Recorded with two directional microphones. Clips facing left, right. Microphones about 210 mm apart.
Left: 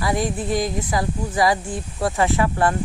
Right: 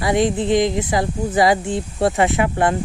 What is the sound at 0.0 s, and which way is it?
Speech, 20° right (ahead or behind).